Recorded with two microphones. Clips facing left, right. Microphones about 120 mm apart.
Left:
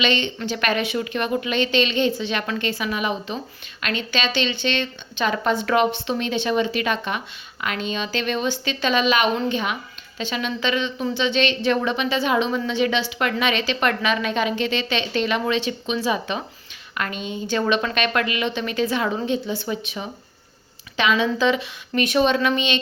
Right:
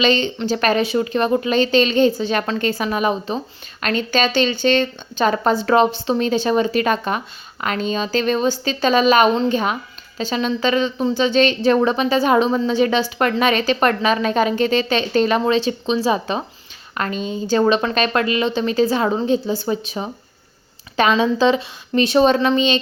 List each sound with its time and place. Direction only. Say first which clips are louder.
0.0 s a woman's voice: right 5 dB; 35° right (ahead or behind)